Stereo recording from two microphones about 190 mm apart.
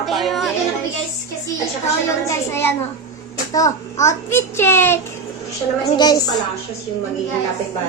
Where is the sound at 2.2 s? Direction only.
15° left (ahead or behind).